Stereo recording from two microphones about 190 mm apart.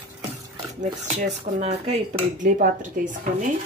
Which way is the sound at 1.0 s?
35° right (ahead or behind).